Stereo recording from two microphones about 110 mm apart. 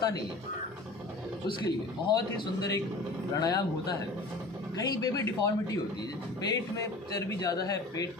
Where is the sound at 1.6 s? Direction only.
40° left (ahead or behind).